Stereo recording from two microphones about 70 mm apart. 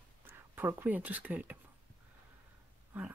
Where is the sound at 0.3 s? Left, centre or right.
Right.